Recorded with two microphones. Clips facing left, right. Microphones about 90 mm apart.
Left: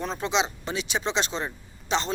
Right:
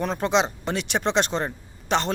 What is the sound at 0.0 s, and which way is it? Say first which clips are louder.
Speech: right 4 dB; 55° right (ahead or behind).